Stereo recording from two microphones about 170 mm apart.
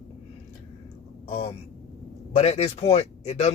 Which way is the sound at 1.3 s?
35° left (ahead or behind).